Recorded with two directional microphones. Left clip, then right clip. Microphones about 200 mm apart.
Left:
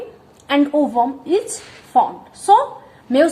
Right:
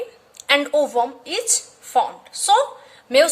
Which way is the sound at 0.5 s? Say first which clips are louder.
Left 1 dB; 35° right (ahead or behind).